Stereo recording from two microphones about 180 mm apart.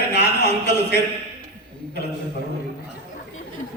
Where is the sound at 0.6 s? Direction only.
70° left (ahead or behind).